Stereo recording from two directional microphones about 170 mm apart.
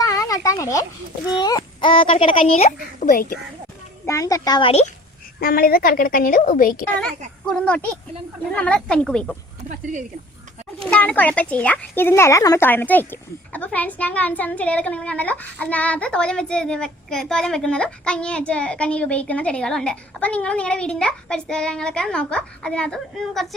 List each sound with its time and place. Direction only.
0.0 s a sound: 20° left (ahead or behind)
1.4 s speech: 25° left (ahead or behind)
3.1 s a woman's voice: 55° left (ahead or behind)
4.0 s a child's voice: 20° left (ahead or behind)
5.4 s a woman's voice: 60° left (ahead or behind)
7.4 s speech: 5° left (ahead or behind)
9.6 s a woman's voice: 45° right (ahead or behind)
10.8 s speech: 5° left (ahead or behind)